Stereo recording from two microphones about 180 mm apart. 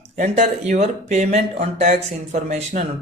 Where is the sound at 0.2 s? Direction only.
40° right (ahead or behind).